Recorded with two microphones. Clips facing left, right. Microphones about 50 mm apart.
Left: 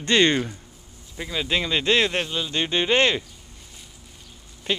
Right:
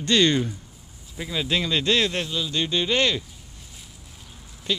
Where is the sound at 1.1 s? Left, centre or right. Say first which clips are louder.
Even; centre; by 3.2 s left.